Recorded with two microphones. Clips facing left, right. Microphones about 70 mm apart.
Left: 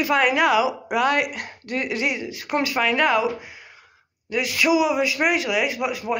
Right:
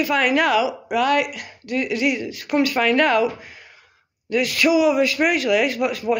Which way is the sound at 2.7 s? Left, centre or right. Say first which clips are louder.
Right 1 dB; centre.